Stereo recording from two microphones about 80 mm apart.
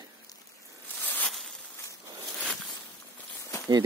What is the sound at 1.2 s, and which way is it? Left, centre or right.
Zipper, centre.